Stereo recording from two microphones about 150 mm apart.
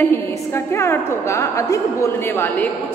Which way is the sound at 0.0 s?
15° left (ahead or behind).